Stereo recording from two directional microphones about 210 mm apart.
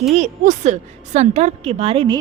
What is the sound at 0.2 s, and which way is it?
A woman's voice, 35° right (ahead or behind).